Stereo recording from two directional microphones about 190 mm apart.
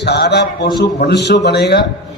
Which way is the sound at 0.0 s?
60° left (ahead or behind).